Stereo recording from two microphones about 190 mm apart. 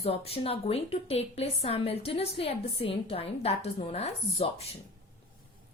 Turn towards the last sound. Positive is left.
turn(degrees=30)  # may be behind; listen again after turning